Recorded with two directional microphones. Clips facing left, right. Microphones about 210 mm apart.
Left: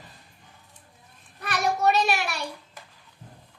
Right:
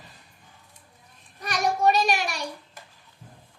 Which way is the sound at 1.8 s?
15° right (ahead or behind).